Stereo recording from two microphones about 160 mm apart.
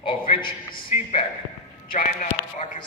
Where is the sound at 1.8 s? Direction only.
60° left (ahead or behind).